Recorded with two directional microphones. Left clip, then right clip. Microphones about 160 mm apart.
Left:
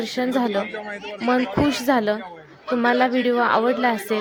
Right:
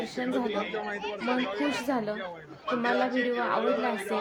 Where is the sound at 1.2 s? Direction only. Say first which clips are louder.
Left 10 dB; 55° left (ahead or behind).